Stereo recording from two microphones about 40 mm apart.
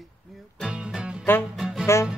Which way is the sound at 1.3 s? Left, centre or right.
Left.